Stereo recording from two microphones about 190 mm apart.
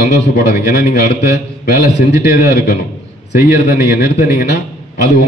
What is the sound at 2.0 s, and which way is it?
A man's voice, 60° left (ahead or behind).